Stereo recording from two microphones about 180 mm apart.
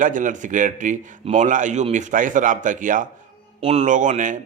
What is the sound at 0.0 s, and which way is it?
A man's voice, 45° right (ahead or behind).